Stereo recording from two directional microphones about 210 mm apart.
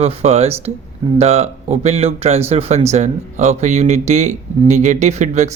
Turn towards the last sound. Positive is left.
turn(degrees=-35)  # may be behind; listen again after turning